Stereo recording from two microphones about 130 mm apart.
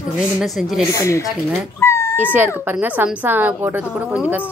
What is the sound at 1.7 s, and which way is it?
Cat, 20° left (ahead or behind).